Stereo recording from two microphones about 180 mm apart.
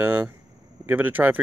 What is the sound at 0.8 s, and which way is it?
Speech, 10° right (ahead or behind).